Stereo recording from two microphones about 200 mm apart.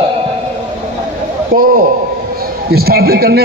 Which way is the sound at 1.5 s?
45° right (ahead or behind).